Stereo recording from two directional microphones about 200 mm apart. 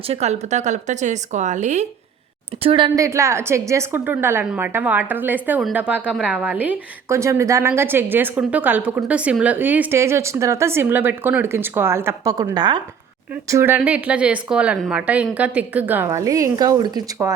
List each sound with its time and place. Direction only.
0.1 s speech: 35° right (ahead or behind)
2.6 s a woman's voice: 25° right (ahead or behind)